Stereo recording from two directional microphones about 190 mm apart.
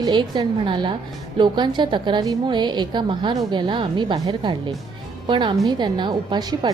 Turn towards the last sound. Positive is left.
turn(degrees=-25)  # may be behind; listen again after turning